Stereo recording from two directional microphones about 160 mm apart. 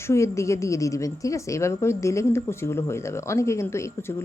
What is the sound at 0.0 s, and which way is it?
A woman's voice, 20° left (ahead or behind).